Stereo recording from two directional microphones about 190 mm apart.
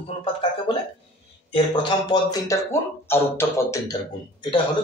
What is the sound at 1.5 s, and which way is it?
Speech, 25° left (ahead or behind).